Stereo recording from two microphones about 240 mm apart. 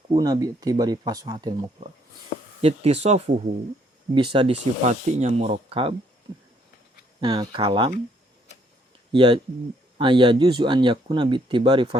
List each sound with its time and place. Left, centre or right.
0.1 s speech: centre
2.6 s speech: right
7.2 s speech: centre
9.1 s speech: right